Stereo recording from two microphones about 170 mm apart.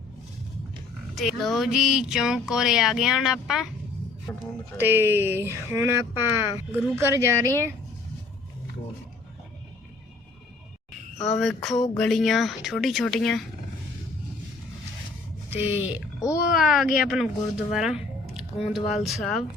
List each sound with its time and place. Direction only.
1.1 s speech: centre (ahead or behind)
4.8 s speech: 10° right (ahead or behind)
11.3 s speech: centre (ahead or behind)
15.4 s speech: 10° right (ahead or behind)
16.4 s a child's voice: 60° left (ahead or behind)
16.7 s speech: 5° right (ahead or behind)